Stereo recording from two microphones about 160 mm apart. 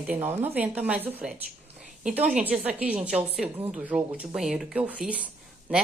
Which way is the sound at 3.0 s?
45° right (ahead or behind).